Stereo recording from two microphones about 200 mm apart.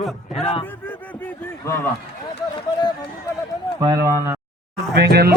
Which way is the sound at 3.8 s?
15° right (ahead or behind).